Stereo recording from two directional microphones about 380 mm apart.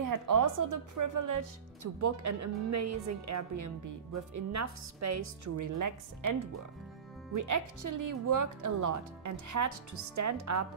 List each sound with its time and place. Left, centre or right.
0.0 s speech: right